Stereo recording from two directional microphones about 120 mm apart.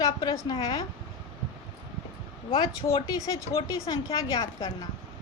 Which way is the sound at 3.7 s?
30° left (ahead or behind).